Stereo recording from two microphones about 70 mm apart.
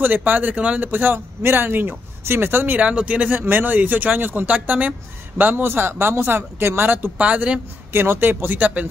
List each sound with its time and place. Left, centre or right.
0.0 s speech: right
5.4 s speech: right
7.9 s speech: right